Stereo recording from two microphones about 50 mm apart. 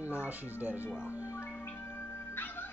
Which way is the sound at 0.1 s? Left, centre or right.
Right.